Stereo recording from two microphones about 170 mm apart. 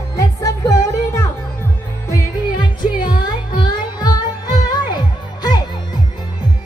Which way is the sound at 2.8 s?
25° left (ahead or behind).